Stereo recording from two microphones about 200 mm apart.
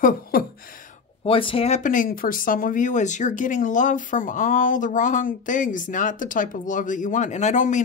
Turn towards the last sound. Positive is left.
turn(degrees=40)  # may be behind; listen again after turning